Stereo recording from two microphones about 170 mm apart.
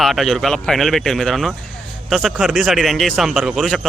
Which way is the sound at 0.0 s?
Centre (ahead or behind).